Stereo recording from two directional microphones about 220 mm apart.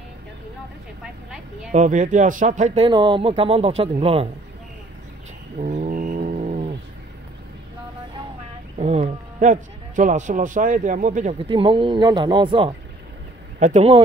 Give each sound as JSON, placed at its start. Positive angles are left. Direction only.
{"t": 1.7, "sound": "speech", "side_deg": -35}
{"t": 5.6, "sound": "mantra", "side_deg": -35}
{"t": 8.7, "sound": "speech", "side_deg": -30}